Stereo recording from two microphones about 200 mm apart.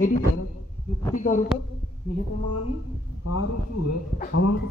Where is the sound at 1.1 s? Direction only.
40° left (ahead or behind).